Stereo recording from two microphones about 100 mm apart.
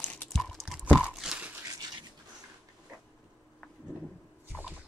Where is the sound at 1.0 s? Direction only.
15° right (ahead or behind).